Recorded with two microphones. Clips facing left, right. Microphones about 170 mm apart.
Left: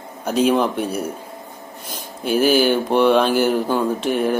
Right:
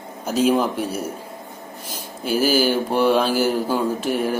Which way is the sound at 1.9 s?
55° left (ahead or behind).